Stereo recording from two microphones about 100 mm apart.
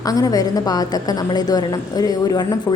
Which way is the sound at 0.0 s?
35° left (ahead or behind).